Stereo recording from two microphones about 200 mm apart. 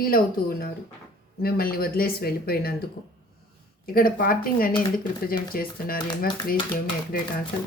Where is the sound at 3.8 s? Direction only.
45° left (ahead or behind).